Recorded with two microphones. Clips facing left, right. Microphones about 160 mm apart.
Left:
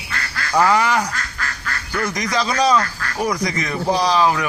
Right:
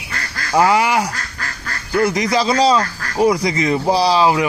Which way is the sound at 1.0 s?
35° right (ahead or behind).